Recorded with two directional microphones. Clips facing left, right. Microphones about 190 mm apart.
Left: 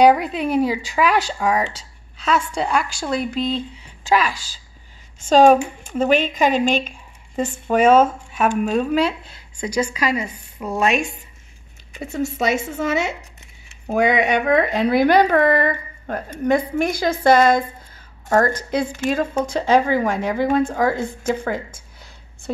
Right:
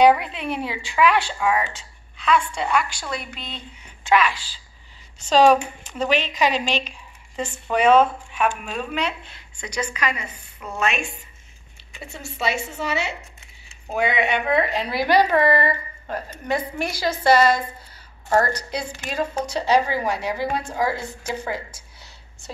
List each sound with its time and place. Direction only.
0.0 s a woman's voice: 40° left (ahead or behind)
10.6 s speech: 35° left (ahead or behind)
11.9 s a woman's voice: 45° left (ahead or behind)